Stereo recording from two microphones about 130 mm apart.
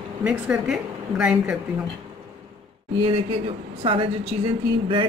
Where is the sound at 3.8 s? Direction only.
40° right (ahead or behind).